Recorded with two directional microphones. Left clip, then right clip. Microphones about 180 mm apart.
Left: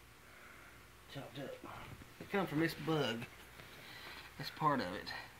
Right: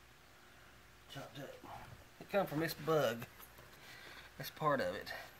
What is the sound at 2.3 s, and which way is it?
Speech, 45° right (ahead or behind).